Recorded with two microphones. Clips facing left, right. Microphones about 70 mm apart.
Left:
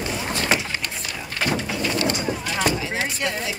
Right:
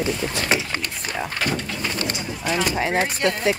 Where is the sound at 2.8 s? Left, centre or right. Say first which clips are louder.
Right 5 dB; right.